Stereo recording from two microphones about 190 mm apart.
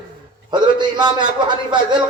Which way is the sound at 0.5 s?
25° right (ahead or behind).